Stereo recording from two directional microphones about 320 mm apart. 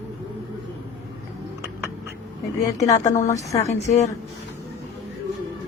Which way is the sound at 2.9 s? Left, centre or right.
Centre.